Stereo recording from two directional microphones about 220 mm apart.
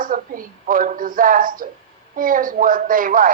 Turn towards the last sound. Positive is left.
turn(degrees=-40)  # may be behind; listen again after turning